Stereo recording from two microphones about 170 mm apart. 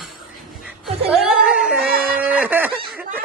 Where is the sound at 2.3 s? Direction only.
10° right (ahead or behind).